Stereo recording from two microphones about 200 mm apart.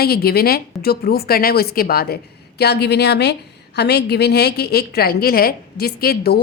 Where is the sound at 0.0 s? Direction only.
50° left (ahead or behind).